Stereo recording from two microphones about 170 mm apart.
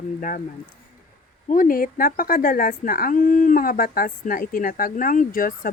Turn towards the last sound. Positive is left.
turn(degrees=55)  # may be behind; listen again after turning